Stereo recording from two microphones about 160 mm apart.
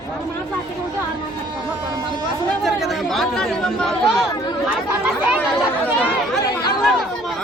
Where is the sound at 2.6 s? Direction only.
Centre (ahead or behind).